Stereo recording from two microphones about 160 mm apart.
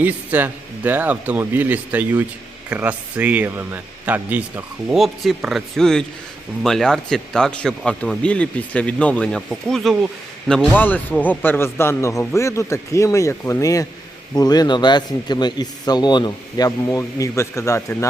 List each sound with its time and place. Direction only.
0.0 s speech: 10° right (ahead or behind); by 17.9 s 20° left (ahead or behind)